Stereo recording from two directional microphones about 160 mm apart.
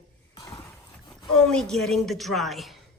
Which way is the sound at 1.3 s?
Centre (ahead or behind).